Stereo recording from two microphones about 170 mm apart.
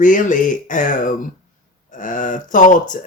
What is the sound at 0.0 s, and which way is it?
Speech, 50° left (ahead or behind).